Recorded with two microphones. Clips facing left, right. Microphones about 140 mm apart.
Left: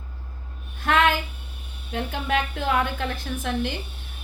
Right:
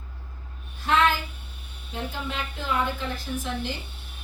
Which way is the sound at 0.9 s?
65° left (ahead or behind).